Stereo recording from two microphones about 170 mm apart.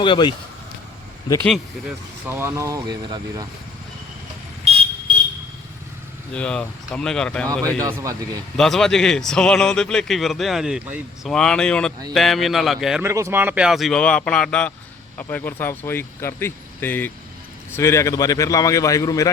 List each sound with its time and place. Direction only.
0.0 s speech: 30° left (ahead or behind)
2.2 s speech: 15° right (ahead or behind)
4.7 s vehicle: 35° right (ahead or behind)
6.3 s speech: 5° left (ahead or behind)
7.8 s speech: 15° right (ahead or behind)
8.5 s speech: 5° left (ahead or behind)
11.3 s speech: 5° left (ahead or behind)
13.0 s speech: 15° right (ahead or behind); by 19.3 s 20° left (ahead or behind)